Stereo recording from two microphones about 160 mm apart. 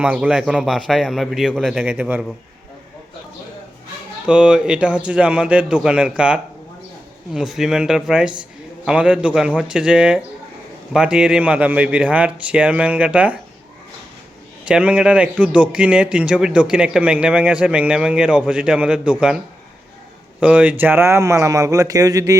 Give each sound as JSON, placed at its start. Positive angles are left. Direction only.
{"t": 0.0, "sound": "a man's voice", "side_deg": -10}
{"t": 4.3, "sound": "a man's voice", "side_deg": -5}
{"t": 14.7, "sound": "a man's voice", "side_deg": -5}
{"t": 20.4, "sound": "speech", "side_deg": -10}